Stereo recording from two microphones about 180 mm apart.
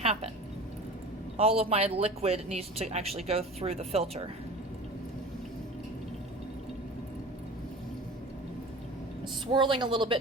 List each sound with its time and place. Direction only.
0.0 s speech: 35° right (ahead or behind)
1.4 s speech: 35° right (ahead or behind)
9.5 s speech: 25° right (ahead or behind)